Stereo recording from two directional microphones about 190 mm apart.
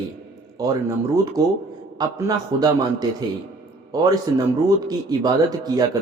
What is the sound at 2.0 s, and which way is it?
Speech, 20° right (ahead or behind).